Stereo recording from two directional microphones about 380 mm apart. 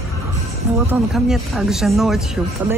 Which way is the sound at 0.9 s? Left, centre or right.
Centre.